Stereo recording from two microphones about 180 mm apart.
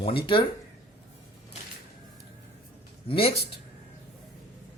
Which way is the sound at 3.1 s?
30° left (ahead or behind).